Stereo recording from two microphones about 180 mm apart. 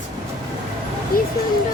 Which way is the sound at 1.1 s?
55° left (ahead or behind).